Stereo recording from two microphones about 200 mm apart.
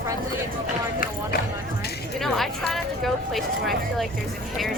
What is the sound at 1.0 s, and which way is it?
Speech, 50° left (ahead or behind).